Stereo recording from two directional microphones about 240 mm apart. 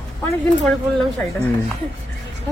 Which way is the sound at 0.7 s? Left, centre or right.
Centre.